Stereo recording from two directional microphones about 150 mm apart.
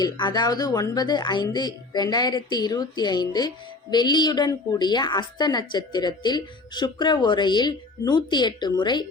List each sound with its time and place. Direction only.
0.0 s a woman's voice: 30° left (ahead or behind)